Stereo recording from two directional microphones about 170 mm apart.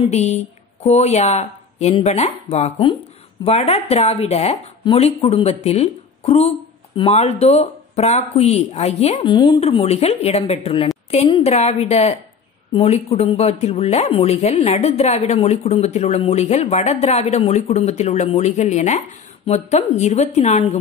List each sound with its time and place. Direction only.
0.0 s speech: 40° left (ahead or behind)